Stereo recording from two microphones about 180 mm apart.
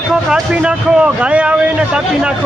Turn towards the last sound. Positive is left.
turn(degrees=-5)  # may be behind; listen again after turning